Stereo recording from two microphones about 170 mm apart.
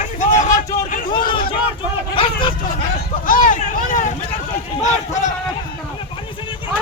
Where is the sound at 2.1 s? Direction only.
30° left (ahead or behind).